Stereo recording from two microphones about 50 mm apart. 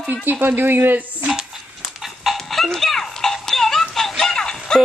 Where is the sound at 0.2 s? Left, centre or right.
Right.